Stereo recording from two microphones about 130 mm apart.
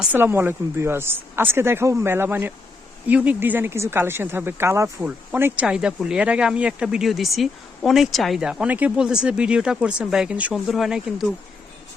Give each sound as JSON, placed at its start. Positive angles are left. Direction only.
{"t": 0.1, "sound": "a man's voice", "side_deg": -15}